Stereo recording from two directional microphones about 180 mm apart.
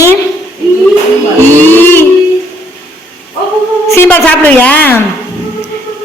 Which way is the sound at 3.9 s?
15° left (ahead or behind).